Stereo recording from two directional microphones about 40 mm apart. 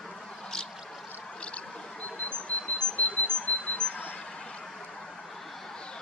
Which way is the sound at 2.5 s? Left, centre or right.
Left.